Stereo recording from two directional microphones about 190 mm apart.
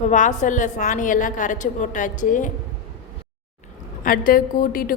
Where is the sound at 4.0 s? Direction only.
50° left (ahead or behind).